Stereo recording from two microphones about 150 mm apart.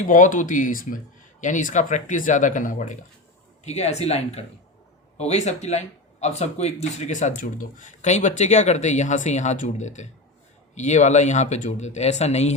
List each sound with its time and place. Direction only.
0.1 s speech: 60° left (ahead or behind)
3.6 s speech: 45° left (ahead or behind)